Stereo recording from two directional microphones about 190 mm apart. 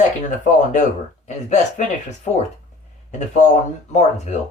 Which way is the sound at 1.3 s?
40° left (ahead or behind).